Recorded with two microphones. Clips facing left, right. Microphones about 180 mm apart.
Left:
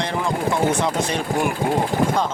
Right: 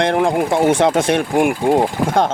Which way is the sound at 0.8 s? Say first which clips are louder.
Right 8 dB; 80° right.